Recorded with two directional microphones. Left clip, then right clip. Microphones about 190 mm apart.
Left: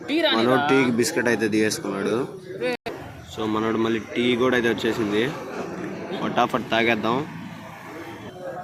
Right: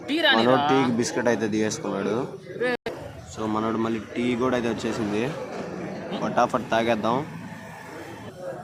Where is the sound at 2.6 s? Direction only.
40° right (ahead or behind).